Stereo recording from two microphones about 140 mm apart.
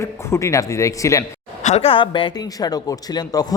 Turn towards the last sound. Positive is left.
turn(degrees=30)  # may be behind; listen again after turning